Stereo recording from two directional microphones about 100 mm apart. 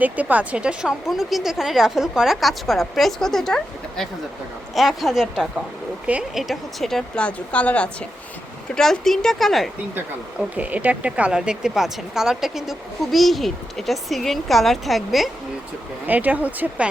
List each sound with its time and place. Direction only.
0.0 s speech: 15° right (ahead or behind)
6.4 s speech: centre (ahead or behind)
10.5 s speech: 15° right (ahead or behind)
16.0 s speech: 15° right (ahead or behind)